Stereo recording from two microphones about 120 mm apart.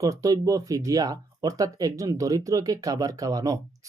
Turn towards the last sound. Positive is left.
turn(degrees=-30)  # may be behind; listen again after turning